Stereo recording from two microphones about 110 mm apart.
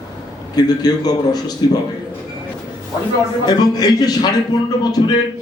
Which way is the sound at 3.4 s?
35° left (ahead or behind).